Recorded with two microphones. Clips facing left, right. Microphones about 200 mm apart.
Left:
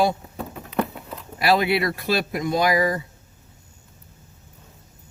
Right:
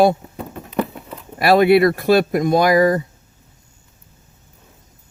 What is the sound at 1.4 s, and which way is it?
Speech, 55° right (ahead or behind).